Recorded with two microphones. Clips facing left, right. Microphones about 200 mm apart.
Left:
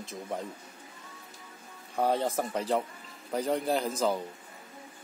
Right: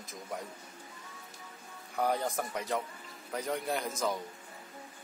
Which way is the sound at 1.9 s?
25° left (ahead or behind).